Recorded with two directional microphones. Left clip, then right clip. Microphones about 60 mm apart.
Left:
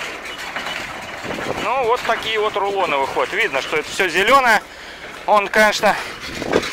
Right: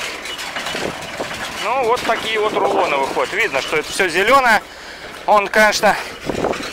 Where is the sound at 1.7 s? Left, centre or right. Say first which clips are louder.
Right 1 dB; centre.